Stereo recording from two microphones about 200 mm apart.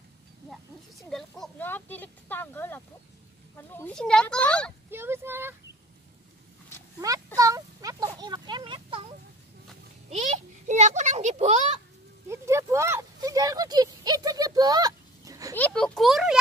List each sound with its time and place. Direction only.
0.5 s a sound: centre (ahead or behind)
1.4 s speech: 10° left (ahead or behind)
4.9 s speech: 10° right (ahead or behind)
7.0 s speech: 15° right (ahead or behind)
10.0 s a child's voice: 35° right (ahead or behind)
12.3 s speech: 15° right (ahead or behind)
15.5 s speech: 5° left (ahead or behind)